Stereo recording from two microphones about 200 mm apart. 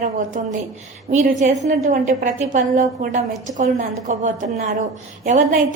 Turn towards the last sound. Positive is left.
turn(degrees=-40)  # may be behind; listen again after turning